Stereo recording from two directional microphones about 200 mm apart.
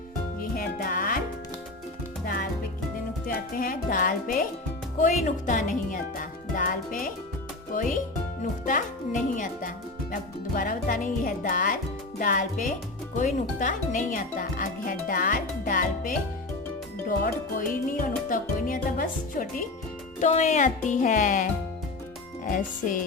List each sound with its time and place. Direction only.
0.3 s music: 45° left (ahead or behind)
2.2 s music: 45° left (ahead or behind)
3.2 s speech: 45° left (ahead or behind)
22.4 s speech: 40° left (ahead or behind)